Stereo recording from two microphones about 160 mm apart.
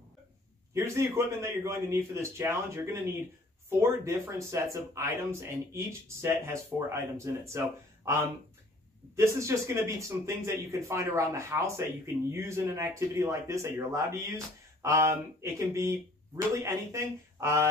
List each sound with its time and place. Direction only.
0.7 s speech: 15° right (ahead or behind)